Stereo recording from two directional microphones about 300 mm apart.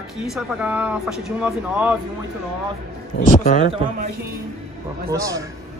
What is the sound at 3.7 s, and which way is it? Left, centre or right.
Speech, right.